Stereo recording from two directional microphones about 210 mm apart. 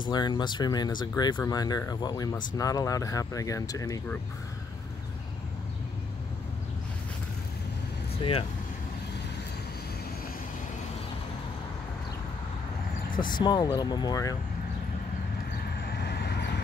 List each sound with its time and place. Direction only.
0.1 s speech: 20° left (ahead or behind)
8.2 s speech: 25° left (ahead or behind)
13.2 s speech: 20° left (ahead or behind)
15.9 s vehicle: 50° left (ahead or behind)